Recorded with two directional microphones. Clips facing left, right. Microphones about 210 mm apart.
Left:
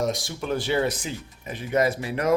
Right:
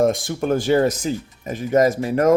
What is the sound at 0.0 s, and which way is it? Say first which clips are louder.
Speech: right 8 dB; 50° right (ahead or behind).